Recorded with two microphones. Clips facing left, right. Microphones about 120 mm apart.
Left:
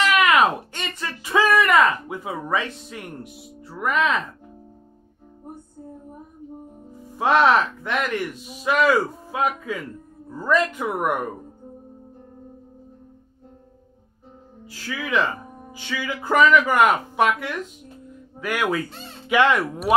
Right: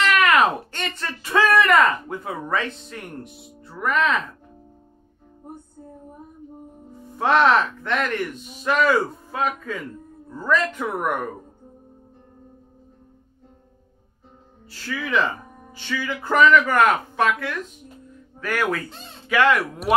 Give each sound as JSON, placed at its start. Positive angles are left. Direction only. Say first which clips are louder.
{"t": 0.0, "sound": "a sound", "louder": "even", "side_deg": 10}
{"t": 7.1, "sound": "speech", "louder": "even", "side_deg": 5}
{"t": 14.7, "sound": "speech", "louder": "even", "side_deg": 10}